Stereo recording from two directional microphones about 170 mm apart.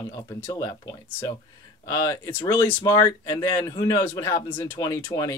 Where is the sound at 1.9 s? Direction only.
20° left (ahead or behind).